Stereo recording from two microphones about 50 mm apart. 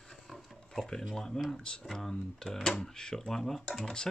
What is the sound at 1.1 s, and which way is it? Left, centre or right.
Speech, centre.